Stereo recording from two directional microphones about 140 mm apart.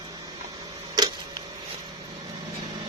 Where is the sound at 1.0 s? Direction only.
25° right (ahead or behind).